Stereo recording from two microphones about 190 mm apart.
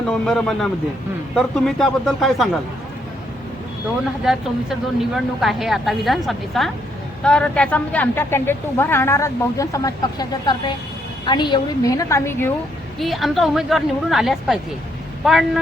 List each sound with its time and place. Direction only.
0.0 s speech: 5° left (ahead or behind)
4.2 s speech: centre (ahead or behind)
13.0 s speech: centre (ahead or behind)